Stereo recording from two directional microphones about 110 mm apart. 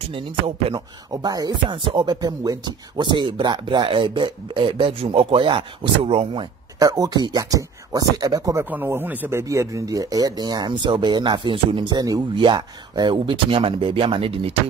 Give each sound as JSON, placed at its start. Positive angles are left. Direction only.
{"t": 0.7, "sound": "speech", "side_deg": -35}
{"t": 6.8, "sound": "speech", "side_deg": -35}
{"t": 8.6, "sound": "speech", "side_deg": -20}